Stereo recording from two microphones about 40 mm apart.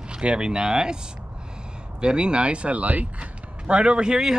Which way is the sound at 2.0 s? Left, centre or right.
Right.